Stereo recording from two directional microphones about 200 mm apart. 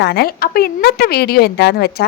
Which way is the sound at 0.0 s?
55° left (ahead or behind).